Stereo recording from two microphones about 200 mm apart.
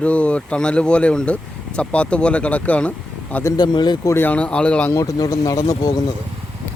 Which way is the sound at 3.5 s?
20° left (ahead or behind).